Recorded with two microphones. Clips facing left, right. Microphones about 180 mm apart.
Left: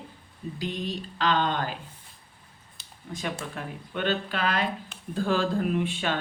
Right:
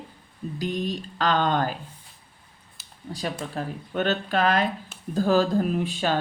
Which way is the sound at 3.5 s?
40° right (ahead or behind).